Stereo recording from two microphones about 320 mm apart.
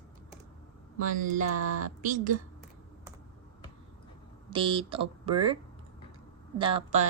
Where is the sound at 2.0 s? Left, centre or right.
Right.